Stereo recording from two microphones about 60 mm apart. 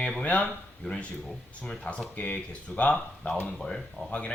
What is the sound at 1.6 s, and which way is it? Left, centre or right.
Speech, centre.